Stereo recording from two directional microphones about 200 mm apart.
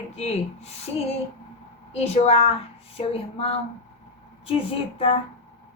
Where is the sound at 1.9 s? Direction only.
30° left (ahead or behind).